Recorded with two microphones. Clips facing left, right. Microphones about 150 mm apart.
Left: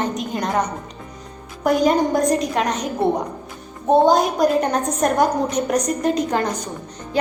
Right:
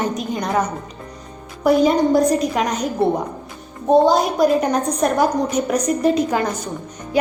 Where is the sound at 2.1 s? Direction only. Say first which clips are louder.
Right 3 dB; 45° left (ahead or behind).